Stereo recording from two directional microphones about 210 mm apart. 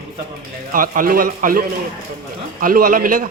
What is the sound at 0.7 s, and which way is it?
A man's voice, 40° right (ahead or behind).